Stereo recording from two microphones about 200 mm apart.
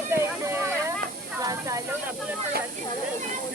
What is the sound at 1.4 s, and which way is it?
Snake, 15° right (ahead or behind).